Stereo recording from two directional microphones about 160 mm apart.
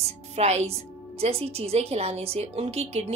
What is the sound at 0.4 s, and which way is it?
Speech, 40° right (ahead or behind).